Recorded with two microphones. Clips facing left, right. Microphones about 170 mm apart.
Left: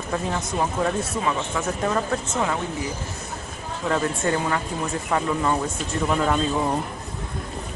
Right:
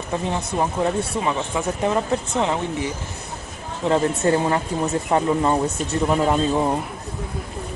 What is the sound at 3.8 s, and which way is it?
Speech, 25° right (ahead or behind).